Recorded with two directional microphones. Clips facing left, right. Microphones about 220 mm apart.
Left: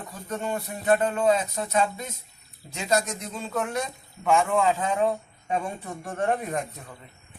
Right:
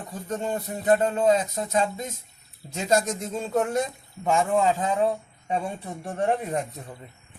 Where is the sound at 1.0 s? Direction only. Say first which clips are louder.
Right 1 dB; 40° right (ahead or behind).